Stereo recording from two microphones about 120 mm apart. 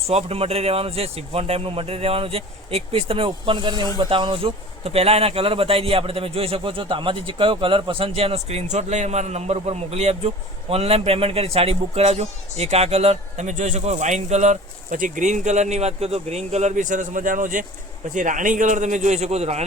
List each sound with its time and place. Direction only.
0.1 s speech: 60° right (ahead or behind)
15.0 s a man's voice: 90° right; by 19.6 s 65° right (ahead or behind)